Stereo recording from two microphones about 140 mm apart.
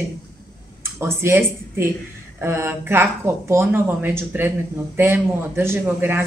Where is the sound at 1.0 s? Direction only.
15° right (ahead or behind).